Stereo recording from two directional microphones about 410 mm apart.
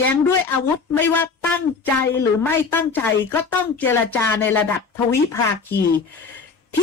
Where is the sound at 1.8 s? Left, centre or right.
Centre.